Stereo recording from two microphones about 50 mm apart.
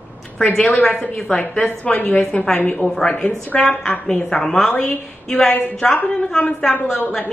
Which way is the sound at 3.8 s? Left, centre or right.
Centre.